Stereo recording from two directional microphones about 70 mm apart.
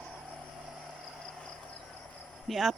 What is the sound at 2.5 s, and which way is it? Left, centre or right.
Speech, centre.